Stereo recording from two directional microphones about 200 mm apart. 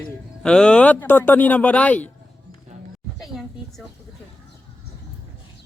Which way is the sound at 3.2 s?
Centre (ahead or behind).